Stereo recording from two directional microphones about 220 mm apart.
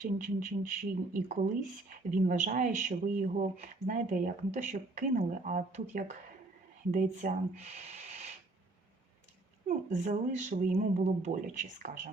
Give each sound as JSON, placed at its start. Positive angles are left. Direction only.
{"t": 0.2, "sound": "speech", "side_deg": -35}
{"t": 9.6, "sound": "speech", "side_deg": -35}